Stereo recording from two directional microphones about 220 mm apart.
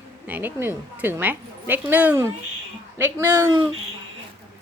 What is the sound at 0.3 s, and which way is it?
Speech, 10° right (ahead or behind).